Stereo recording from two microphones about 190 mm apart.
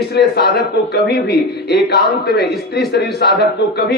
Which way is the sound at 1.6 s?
60° left (ahead or behind).